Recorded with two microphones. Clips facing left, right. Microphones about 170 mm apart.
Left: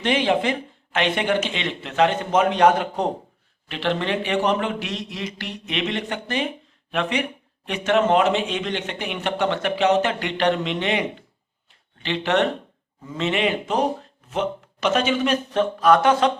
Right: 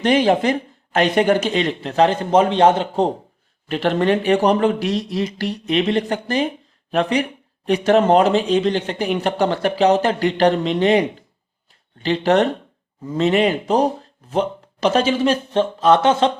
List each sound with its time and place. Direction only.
0.0 s speech: 40° right (ahead or behind)
3.7 s speech: 45° right (ahead or behind)
11.7 s a sound: 40° right (ahead or behind)
13.1 s speech: 40° right (ahead or behind)